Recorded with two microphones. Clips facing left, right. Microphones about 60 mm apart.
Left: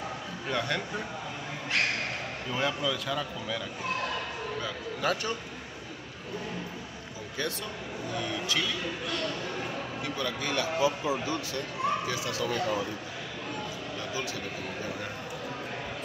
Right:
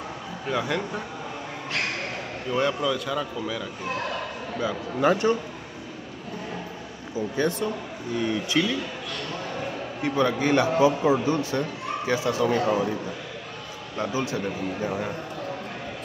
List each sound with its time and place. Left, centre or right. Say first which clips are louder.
0.5 s a man's voice: right 4 dB; centre
2.5 s a man's voice: right 6 dB; centre
4.6 s speech: right 8 dB; centre
8.2 s speech: right 8 dB; right
10.0 s speech: right 12 dB; right
13.9 s speech: right 10 dB; right